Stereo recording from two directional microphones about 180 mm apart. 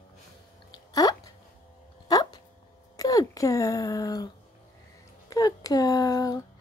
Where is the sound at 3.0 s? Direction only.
20° left (ahead or behind).